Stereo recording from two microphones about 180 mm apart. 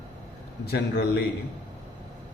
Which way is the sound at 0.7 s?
60° left (ahead or behind).